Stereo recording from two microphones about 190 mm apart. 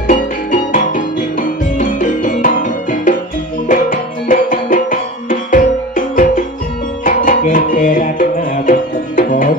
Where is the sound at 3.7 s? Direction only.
45° left (ahead or behind).